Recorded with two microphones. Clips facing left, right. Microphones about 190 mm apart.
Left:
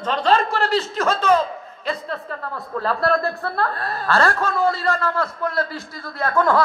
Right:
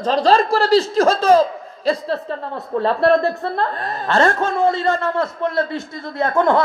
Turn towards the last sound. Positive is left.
turn(degrees=-25)  # may be behind; listen again after turning